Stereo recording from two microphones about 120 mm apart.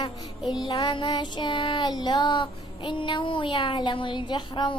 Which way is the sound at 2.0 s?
40° left (ahead or behind).